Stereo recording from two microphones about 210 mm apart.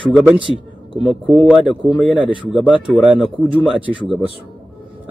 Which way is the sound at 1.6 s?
25° left (ahead or behind).